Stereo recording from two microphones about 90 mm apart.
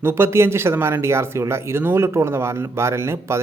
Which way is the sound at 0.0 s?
30° right (ahead or behind).